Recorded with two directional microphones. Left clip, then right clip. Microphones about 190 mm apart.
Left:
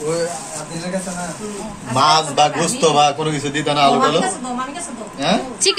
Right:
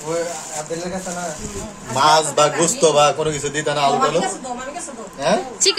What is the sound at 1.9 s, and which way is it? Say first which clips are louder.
A man's voice: left 1 dB; 55° right (ahead or behind).